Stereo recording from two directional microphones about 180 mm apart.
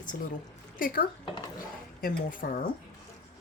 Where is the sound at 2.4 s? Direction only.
55° left (ahead or behind).